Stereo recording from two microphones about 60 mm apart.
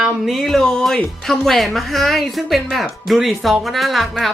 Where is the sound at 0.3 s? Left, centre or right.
Centre.